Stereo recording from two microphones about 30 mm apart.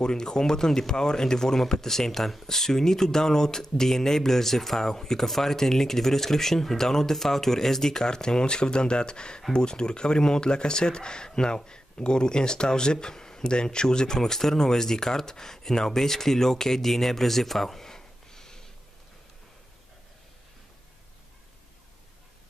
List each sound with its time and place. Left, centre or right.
0.0 s speech: left
8.1 s speech: left; by 17.8 s centre
17.8 s a sound: centre